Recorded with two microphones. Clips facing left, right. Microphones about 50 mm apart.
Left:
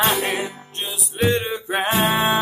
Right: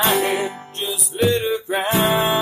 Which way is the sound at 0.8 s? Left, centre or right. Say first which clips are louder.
Right 2 dB; left.